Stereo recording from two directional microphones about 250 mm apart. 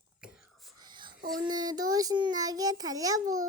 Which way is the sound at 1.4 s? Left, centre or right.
Centre.